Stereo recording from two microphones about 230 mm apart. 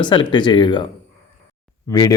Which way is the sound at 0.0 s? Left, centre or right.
Centre.